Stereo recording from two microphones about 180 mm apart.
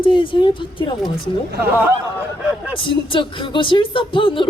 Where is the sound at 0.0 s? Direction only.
30° left (ahead or behind).